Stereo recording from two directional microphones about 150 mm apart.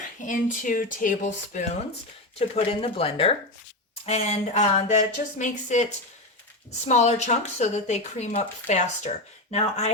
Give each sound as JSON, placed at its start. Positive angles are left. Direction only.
{"t": 0.3, "sound": "speech", "side_deg": 60}
{"t": 2.6, "sound": "speech", "side_deg": 40}